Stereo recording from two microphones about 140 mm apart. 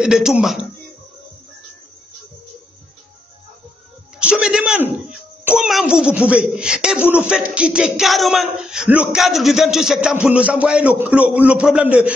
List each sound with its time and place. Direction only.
0.0 s speech: 5° right (ahead or behind)
4.2 s a sound: 5° right (ahead or behind)
4.9 s speech: 10° right (ahead or behind)